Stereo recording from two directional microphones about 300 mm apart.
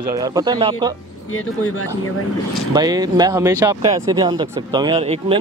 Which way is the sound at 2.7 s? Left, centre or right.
Centre.